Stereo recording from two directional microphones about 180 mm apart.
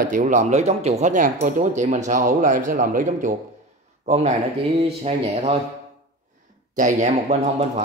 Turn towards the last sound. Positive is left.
turn(degrees=-40)  # may be behind; listen again after turning